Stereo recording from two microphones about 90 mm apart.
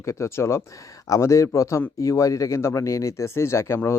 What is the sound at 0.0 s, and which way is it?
Speech, 30° left (ahead or behind).